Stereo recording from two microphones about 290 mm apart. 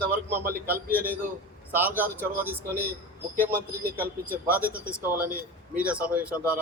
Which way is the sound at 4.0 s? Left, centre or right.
Centre.